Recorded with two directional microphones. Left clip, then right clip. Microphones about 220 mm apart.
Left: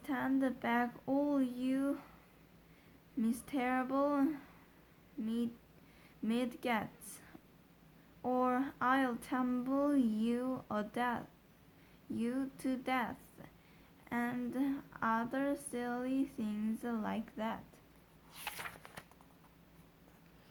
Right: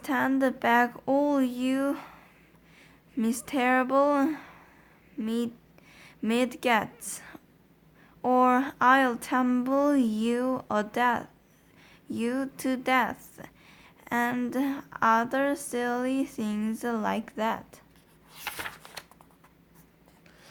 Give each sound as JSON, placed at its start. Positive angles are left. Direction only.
{"t": 0.0, "sound": "speech", "side_deg": -25}
{"t": 3.2, "sound": "speech", "side_deg": -25}
{"t": 18.3, "sound": "a sound", "side_deg": 5}